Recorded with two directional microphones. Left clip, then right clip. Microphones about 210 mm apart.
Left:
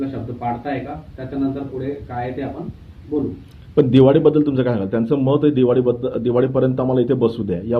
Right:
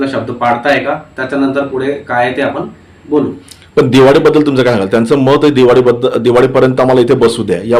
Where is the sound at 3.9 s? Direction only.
15° right (ahead or behind).